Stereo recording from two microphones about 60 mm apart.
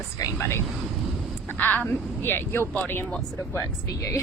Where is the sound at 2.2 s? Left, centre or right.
Left.